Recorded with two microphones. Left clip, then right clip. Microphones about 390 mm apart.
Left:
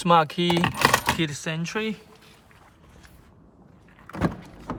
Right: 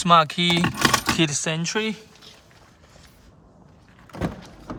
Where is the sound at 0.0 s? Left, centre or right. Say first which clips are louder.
Right 3 dB; centre.